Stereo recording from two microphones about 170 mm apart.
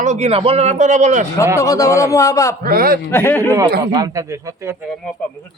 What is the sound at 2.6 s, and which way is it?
Speech, 60° right (ahead or behind).